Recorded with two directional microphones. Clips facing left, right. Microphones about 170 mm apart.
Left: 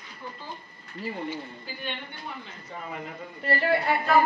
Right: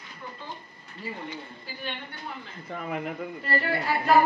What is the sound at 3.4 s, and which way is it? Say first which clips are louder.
Speech: left 4 dB; 25° left (ahead or behind).